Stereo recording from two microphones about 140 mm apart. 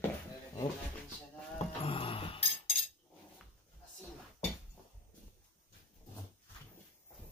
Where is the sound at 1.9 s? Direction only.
40° left (ahead or behind).